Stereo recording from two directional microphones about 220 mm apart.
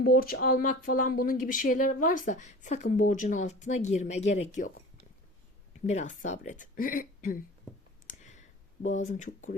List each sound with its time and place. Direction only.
0.0 s speech: 45° left (ahead or behind)
5.8 s speech: 30° left (ahead or behind)
8.0 s clicking: 35° left (ahead or behind)
8.8 s speech: 35° left (ahead or behind)